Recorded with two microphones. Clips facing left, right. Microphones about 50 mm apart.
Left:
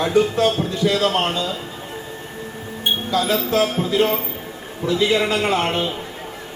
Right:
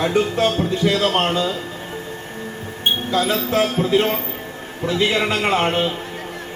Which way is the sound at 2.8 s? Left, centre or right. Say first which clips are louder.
Right 1 dB; right.